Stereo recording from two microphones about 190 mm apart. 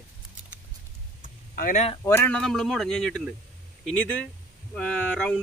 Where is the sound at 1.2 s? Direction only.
45° left (ahead or behind).